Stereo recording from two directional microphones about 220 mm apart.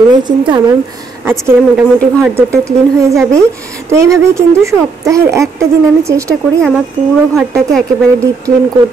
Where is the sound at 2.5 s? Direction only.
15° right (ahead or behind).